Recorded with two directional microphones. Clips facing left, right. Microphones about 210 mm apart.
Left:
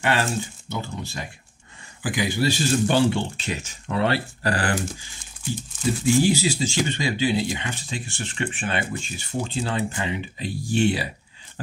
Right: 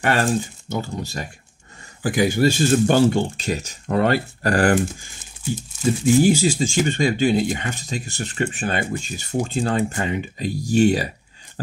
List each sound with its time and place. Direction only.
0.0 s speech: 45° right (ahead or behind)
6.2 s speech: 50° right (ahead or behind)